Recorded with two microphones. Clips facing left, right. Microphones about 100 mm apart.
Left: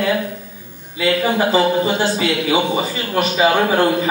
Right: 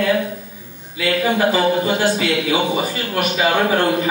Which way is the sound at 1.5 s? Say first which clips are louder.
Left 1 dB; 25° left (ahead or behind).